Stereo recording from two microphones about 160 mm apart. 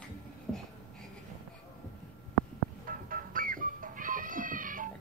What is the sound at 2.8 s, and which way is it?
Music, 60° right (ahead or behind).